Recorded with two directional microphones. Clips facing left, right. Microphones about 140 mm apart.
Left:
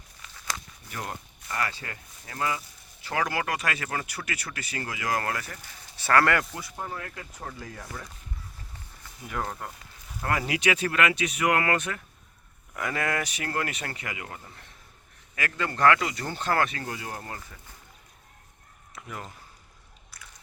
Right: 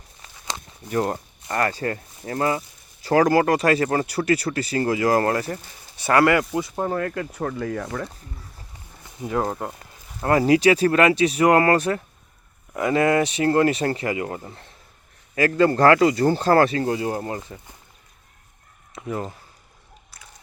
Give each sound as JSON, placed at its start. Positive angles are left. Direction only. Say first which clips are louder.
{"t": 0.2, "sound": "walk", "louder": "right 1 dB", "side_deg": -40}
{"t": 0.9, "sound": "speech", "louder": "right 13 dB", "side_deg": -45}
{"t": 6.0, "sound": "speech", "louder": "right 5 dB", "side_deg": -15}
{"t": 6.5, "sound": "speech", "louder": "right 14 dB", "side_deg": -25}
{"t": 6.7, "sound": "speech", "louder": "right 10 dB", "side_deg": -50}
{"t": 9.2, "sound": "speech", "louder": "right 9 dB", "side_deg": -30}
{"t": 18.9, "sound": "speech", "louder": "right 11 dB", "side_deg": -30}
{"t": 20.1, "sound": "a sound", "louder": "right 1 dB", "side_deg": -25}